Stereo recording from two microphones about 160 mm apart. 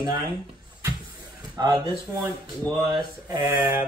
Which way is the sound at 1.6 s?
25° right (ahead or behind).